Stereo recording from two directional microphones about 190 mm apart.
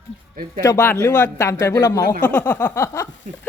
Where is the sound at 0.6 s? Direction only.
15° left (ahead or behind).